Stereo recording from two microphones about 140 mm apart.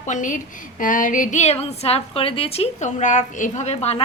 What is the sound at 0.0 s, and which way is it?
A woman's voice, 65° left (ahead or behind).